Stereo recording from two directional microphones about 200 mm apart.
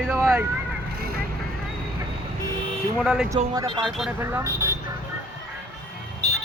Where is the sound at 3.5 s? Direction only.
20° right (ahead or behind).